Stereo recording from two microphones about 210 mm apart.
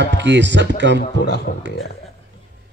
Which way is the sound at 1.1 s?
50° left (ahead or behind).